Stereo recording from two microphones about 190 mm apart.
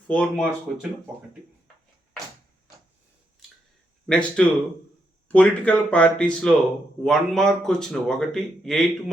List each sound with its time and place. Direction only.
0.1 s speech: 5° left (ahead or behind)
4.0 s speech: 5° left (ahead or behind)